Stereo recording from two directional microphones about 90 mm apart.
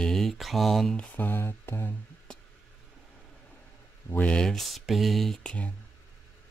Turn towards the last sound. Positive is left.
turn(degrees=15)  # may be behind; listen again after turning